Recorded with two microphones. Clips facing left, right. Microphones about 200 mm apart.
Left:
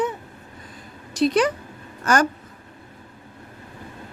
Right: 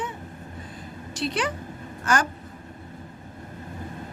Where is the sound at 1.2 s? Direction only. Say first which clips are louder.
Left 9 dB; 40° left (ahead or behind).